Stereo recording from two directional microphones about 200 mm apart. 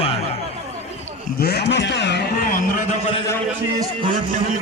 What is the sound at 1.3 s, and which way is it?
Speech, 55° left (ahead or behind).